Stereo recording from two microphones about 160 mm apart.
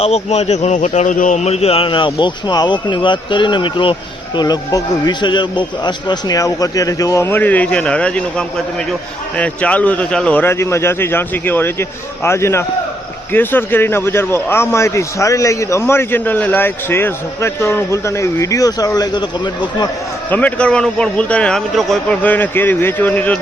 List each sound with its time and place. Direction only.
0.0 s a man's voice: 40° left (ahead or behind)
20.3 s a man's voice: 10° left (ahead or behind)